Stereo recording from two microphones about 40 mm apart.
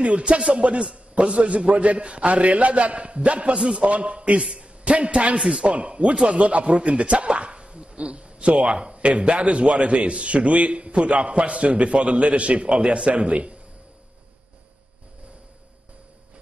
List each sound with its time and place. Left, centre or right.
0.0 s a man's voice: right